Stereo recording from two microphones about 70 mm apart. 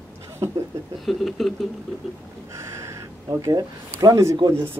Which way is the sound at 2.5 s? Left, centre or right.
Right.